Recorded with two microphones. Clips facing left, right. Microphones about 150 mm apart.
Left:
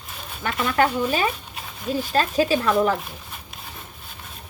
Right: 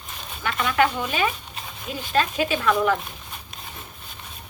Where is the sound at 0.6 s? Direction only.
40° left (ahead or behind).